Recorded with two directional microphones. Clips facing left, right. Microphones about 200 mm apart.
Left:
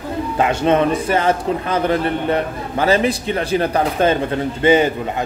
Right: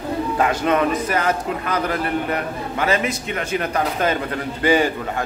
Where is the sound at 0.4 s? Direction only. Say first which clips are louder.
Left 4 dB; 25° left (ahead or behind).